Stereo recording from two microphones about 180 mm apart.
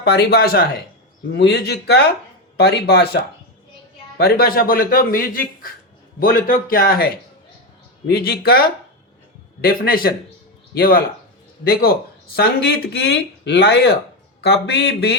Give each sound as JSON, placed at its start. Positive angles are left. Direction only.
{"t": 0.0, "sound": "speech", "side_deg": 65}
{"t": 4.2, "sound": "speech", "side_deg": 55}